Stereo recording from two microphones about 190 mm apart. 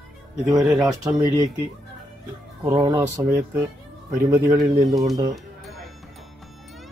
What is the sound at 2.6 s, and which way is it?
Speech, 20° right (ahead or behind).